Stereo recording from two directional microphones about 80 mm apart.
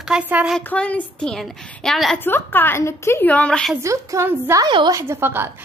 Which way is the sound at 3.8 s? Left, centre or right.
Right.